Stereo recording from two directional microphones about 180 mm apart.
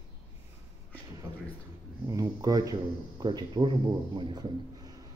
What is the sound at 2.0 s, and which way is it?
Speech, 20° right (ahead or behind).